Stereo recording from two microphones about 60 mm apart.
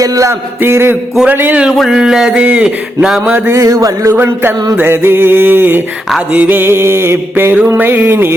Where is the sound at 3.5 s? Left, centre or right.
Right.